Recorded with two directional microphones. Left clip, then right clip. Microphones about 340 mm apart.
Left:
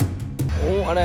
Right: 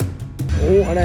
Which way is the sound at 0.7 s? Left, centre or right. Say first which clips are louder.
Right 5 dB; left.